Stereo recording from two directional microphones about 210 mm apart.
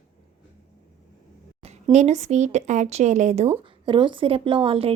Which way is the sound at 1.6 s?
30° right (ahead or behind).